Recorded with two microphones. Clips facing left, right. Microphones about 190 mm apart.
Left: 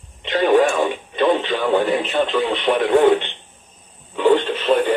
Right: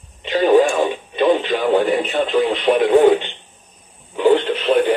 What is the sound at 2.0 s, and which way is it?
Speech, 15° right (ahead or behind).